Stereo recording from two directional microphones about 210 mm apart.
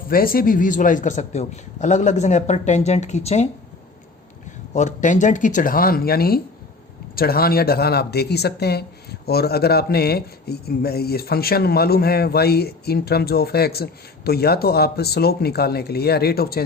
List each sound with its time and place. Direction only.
0.1 s a man's voice: 45° left (ahead or behind)
4.7 s a man's voice: 35° left (ahead or behind)